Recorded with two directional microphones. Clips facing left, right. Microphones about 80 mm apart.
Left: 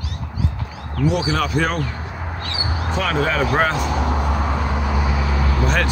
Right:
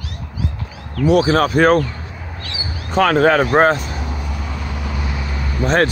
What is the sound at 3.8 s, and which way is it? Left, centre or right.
Vehicle, left.